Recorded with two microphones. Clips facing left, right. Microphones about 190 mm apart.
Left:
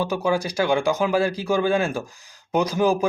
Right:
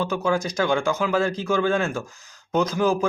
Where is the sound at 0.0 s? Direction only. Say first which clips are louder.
Left 1 dB; 15° left (ahead or behind).